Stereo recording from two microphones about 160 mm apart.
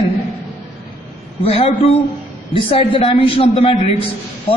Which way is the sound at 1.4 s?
40° left (ahead or behind).